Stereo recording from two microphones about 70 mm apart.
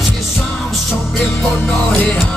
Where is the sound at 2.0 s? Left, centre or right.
Left.